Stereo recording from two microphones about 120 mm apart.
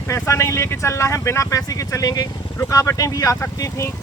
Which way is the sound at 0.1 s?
25° left (ahead or behind).